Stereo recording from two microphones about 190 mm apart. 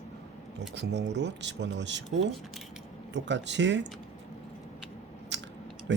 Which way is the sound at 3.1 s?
70° right (ahead or behind).